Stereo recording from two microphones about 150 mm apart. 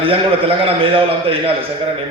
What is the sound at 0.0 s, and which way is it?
A man's voice, 35° right (ahead or behind).